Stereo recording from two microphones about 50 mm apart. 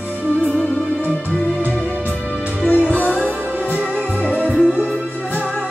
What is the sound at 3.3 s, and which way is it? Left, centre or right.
Music, right.